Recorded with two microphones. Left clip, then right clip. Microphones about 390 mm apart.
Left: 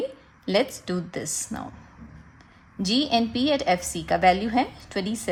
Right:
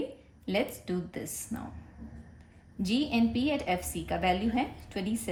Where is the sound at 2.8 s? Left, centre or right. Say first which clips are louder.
Left 7 dB; centre.